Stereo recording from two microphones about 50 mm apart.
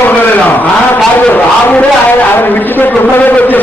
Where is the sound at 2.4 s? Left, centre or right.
Left.